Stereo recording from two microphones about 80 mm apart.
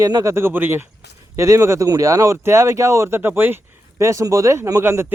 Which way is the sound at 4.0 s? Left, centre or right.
Right.